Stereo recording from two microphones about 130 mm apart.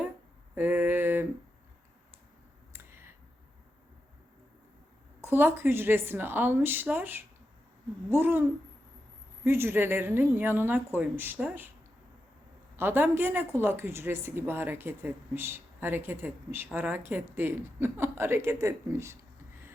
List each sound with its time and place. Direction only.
0.5 s a sound: 15° right (ahead or behind)
2.7 s clicking: 20° right (ahead or behind)
5.2 s a woman's voice: 15° right (ahead or behind)
12.7 s a woman's voice: 15° right (ahead or behind)